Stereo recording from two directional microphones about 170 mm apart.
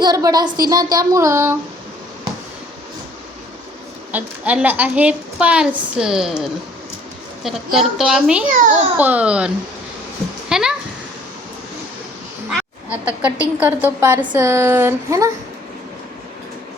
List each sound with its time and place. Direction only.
0.0 s a sound: 20° right (ahead or behind)
4.1 s a woman's voice: 10° right (ahead or behind)
8.4 s a child's voice: 50° right (ahead or behind)
9.0 s a woman's voice: 10° right (ahead or behind)
10.5 s a sound: 5° right (ahead or behind)
12.5 s a woman's voice: 5° right (ahead or behind)